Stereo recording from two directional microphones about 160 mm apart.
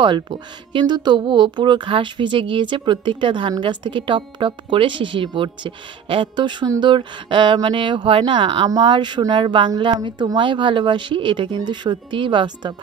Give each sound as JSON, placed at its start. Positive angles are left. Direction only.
{"t": 0.0, "sound": "speech", "side_deg": -30}